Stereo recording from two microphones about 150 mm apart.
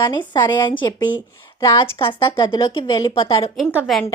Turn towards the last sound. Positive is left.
turn(degrees=0)  # may be behind; listen again after turning